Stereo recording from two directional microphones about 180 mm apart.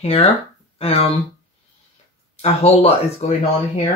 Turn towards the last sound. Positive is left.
turn(degrees=35)  # may be behind; listen again after turning